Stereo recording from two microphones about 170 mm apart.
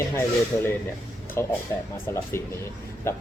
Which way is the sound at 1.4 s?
15° left (ahead or behind).